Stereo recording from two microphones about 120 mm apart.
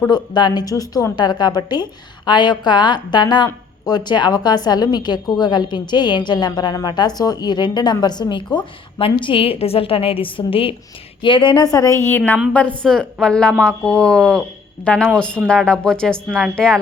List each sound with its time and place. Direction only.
0.1 s a woman's voice: 35° left (ahead or behind)
12.0 s a woman's voice: 15° left (ahead or behind)